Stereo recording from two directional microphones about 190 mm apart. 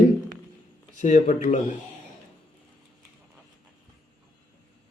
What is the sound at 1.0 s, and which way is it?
Speech, 40° left (ahead or behind).